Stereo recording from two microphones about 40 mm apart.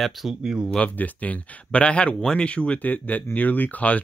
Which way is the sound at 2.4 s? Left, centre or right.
Left.